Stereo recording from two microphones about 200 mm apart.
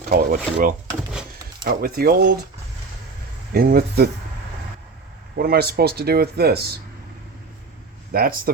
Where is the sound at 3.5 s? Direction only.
50° right (ahead or behind).